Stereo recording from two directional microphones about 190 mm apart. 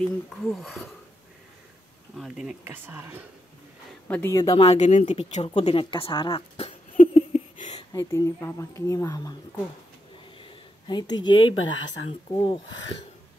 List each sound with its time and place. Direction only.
0.0 s speech: centre (ahead or behind)
2.1 s speech: centre (ahead or behind)
4.1 s speech: 15° left (ahead or behind)
4.6 s speech: 35° left (ahead or behind)
7.7 s speech: 15° left (ahead or behind)
10.9 s speech: 25° left (ahead or behind)
11.3 s speech: 90° left
12.1 s speech: 25° left (ahead or behind)
12.6 s speech: 90° left